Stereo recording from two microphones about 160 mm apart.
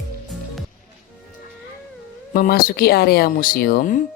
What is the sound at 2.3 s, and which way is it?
Speech, 65° left (ahead or behind).